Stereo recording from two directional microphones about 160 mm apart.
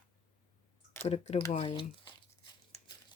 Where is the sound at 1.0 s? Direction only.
40° left (ahead or behind).